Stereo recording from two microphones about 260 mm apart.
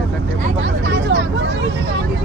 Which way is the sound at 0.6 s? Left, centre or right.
Right.